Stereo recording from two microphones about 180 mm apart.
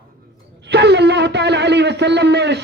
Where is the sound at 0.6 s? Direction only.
70° right (ahead or behind).